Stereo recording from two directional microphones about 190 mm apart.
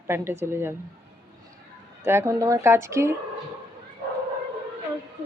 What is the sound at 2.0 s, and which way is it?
Speech, 15° right (ahead or behind).